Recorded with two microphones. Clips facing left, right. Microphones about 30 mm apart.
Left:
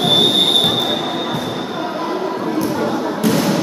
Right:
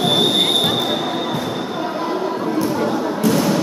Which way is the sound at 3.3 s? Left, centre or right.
Left.